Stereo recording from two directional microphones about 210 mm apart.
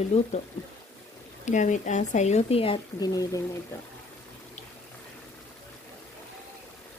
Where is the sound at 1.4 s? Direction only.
35° left (ahead or behind); by 3.4 s 20° left (ahead or behind).